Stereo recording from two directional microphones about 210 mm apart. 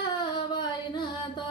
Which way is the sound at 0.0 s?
20° left (ahead or behind).